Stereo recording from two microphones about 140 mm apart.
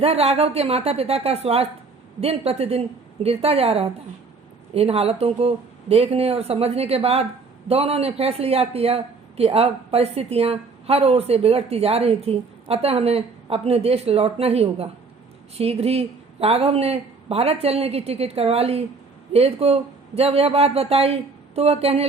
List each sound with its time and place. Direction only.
0.0 s a woman's voice: 45° right (ahead or behind)